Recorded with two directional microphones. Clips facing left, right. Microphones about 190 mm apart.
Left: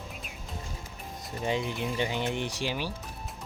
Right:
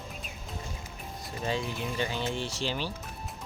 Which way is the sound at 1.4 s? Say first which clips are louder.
Left 2 dB; 20° left (ahead or behind).